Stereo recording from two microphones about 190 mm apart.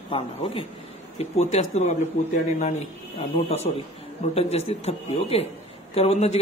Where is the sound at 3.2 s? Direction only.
35° left (ahead or behind).